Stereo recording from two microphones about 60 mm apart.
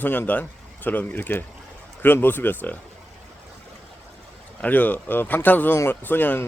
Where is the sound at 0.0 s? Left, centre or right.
Left.